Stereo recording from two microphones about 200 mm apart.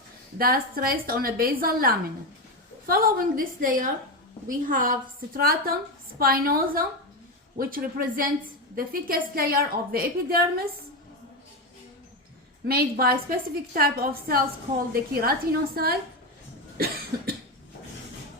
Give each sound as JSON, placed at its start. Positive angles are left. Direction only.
{"t": 0.3, "sound": "a woman's voice", "side_deg": -50}
{"t": 12.6, "sound": "a woman's voice", "side_deg": -50}
{"t": 16.7, "sound": "cough", "side_deg": -50}